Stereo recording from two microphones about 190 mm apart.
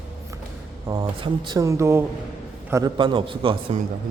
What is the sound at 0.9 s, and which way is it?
A man's voice, 20° right (ahead or behind).